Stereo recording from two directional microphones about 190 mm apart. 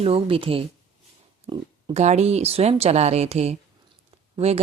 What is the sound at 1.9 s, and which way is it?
A woman's voice, 35° right (ahead or behind).